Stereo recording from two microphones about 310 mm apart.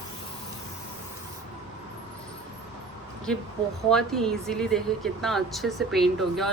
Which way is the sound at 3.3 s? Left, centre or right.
Centre.